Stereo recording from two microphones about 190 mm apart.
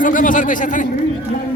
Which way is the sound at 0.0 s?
45° left (ahead or behind).